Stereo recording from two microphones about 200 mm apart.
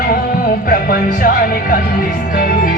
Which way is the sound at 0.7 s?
45° left (ahead or behind).